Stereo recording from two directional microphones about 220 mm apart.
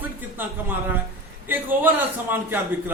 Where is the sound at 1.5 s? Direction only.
10° right (ahead or behind).